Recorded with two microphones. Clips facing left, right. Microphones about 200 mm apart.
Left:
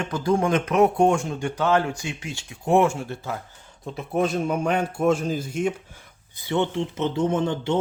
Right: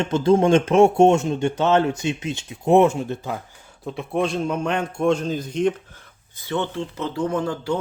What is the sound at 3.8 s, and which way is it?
A man's voice, centre (ahead or behind).